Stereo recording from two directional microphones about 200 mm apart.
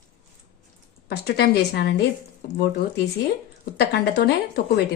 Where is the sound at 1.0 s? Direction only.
55° left (ahead or behind).